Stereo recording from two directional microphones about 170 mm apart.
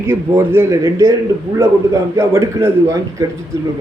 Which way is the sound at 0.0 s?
15° right (ahead or behind).